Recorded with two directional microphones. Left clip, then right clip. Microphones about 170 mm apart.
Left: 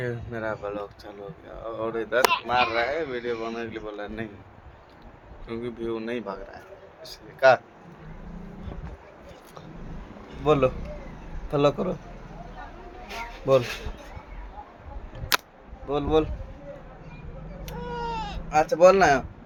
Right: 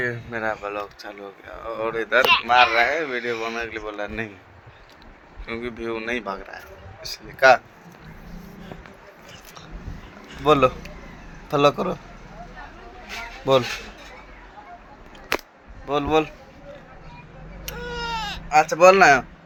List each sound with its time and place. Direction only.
0.0 s speech: 20° right (ahead or behind)
5.5 s speech: 20° right (ahead or behind)
7.3 s speech: 30° right (ahead or behind)
10.4 s speech: 20° right (ahead or behind)
13.5 s speech: 10° right (ahead or behind)
15.9 s speech: 15° right (ahead or behind)
17.7 s baby cry: 25° left (ahead or behind)
18.4 s speech: 30° right (ahead or behind)